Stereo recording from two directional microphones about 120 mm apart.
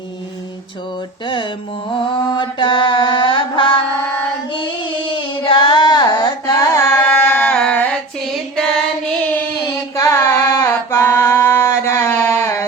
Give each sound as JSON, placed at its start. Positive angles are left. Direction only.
{"t": 2.1, "sound": "mantra", "side_deg": 40}
{"t": 4.5, "sound": "child singing", "side_deg": 45}
{"t": 5.4, "sound": "carnatic music", "side_deg": 40}
{"t": 7.5, "sound": "a sound", "side_deg": 10}
{"t": 9.9, "sound": "singing", "side_deg": 25}